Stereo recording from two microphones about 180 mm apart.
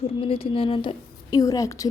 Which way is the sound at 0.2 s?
30° left (ahead or behind).